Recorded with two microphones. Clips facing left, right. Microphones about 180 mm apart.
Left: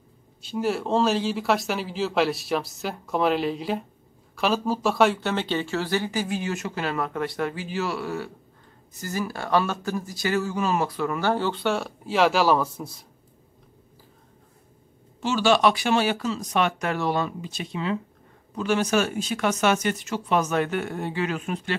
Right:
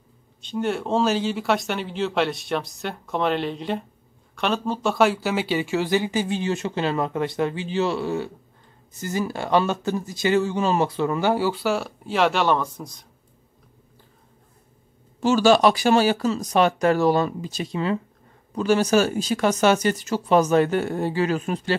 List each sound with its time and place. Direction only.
0.4 s speech: 5° left (ahead or behind); by 11.2 s 25° right (ahead or behind)
11.2 s speech: 10° right (ahead or behind)
15.1 s speech: 40° right (ahead or behind)